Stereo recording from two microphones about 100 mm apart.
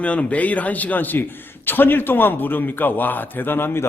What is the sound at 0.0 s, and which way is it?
A man's voice, 15° left (ahead or behind).